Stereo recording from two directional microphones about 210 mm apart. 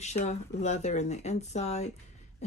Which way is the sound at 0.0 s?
35° left (ahead or behind).